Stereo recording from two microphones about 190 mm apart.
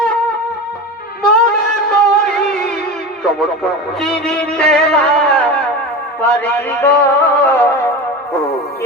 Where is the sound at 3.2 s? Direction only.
Centre (ahead or behind).